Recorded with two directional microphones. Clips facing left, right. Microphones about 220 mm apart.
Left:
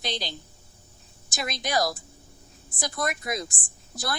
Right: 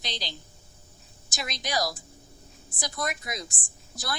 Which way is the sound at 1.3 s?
50° left (ahead or behind).